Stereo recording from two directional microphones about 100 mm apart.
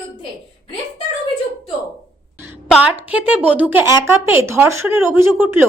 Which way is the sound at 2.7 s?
10° right (ahead or behind).